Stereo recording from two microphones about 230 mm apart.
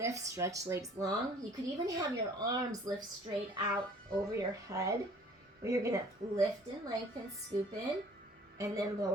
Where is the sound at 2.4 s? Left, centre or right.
Centre.